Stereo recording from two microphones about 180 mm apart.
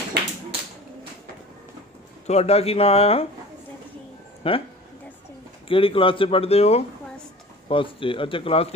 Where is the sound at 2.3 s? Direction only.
35° left (ahead or behind).